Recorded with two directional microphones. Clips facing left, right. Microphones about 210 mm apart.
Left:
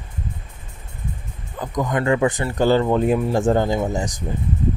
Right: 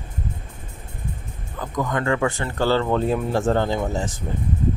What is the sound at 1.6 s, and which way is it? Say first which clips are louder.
Speech: left 2 dB; 20° left (ahead or behind).